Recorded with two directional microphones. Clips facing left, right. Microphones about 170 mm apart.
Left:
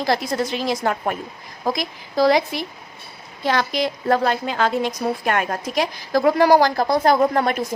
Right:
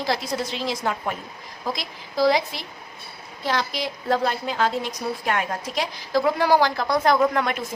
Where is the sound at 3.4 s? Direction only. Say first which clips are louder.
Left 5 dB; 55° left (ahead or behind); by 7.6 s 35° left (ahead or behind).